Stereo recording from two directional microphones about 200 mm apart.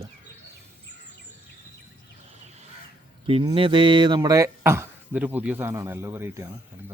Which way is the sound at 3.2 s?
30° right (ahead or behind).